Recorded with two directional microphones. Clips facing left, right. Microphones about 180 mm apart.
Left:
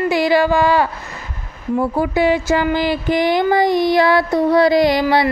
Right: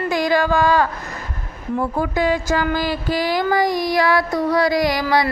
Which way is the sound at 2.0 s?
10° left (ahead or behind).